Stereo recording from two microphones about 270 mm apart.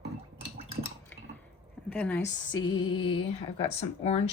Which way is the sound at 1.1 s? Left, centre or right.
Centre.